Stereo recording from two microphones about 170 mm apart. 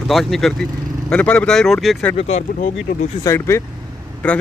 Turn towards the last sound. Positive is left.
turn(degrees=5)  # may be behind; listen again after turning